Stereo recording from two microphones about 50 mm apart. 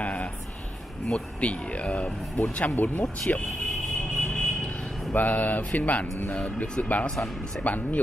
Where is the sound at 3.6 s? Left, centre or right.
Centre.